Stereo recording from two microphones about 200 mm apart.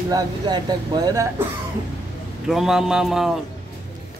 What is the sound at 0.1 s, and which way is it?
Speech, 20° right (ahead or behind).